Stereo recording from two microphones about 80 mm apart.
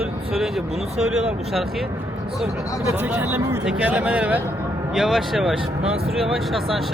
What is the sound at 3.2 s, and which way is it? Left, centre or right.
Speech, right.